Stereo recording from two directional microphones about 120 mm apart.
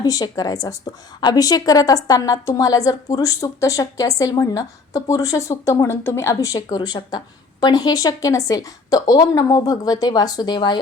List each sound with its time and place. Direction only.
0.0 s a woman's voice: 30° left (ahead or behind)